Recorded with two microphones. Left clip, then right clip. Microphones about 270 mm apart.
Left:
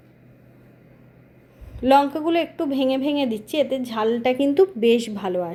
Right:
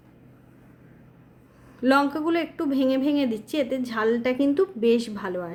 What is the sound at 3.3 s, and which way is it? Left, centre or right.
Speech, centre.